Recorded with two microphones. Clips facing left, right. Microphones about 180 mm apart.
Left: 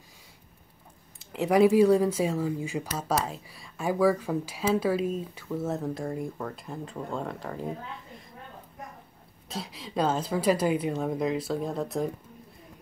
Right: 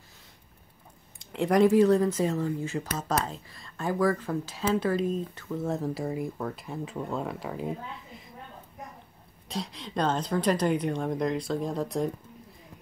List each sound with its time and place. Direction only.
1.2 s speech: 5° left (ahead or behind)
9.5 s a woman's voice: 5° left (ahead or behind)